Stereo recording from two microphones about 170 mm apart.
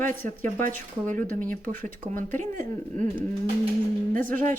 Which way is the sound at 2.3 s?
50° right (ahead or behind).